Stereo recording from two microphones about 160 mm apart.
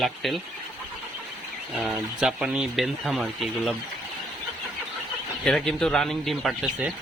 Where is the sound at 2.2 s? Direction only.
5° right (ahead or behind).